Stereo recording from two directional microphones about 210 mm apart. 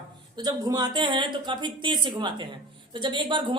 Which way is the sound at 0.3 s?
20° right (ahead or behind).